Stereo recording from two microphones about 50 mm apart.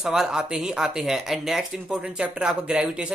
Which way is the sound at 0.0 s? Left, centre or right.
Centre.